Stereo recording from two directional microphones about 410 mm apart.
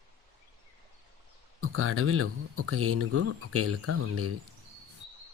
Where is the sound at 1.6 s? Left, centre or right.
Right.